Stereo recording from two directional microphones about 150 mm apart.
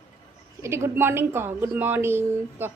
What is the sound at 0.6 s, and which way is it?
A woman's voice, 15° right (ahead or behind).